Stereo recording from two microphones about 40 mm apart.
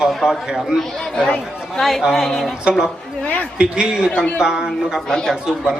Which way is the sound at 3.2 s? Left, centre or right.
Left.